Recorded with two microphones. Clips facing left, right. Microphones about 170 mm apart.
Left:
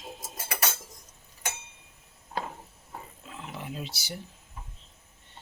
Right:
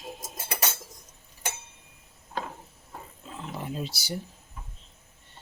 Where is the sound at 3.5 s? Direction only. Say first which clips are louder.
Right 4 dB; 40° right (ahead or behind).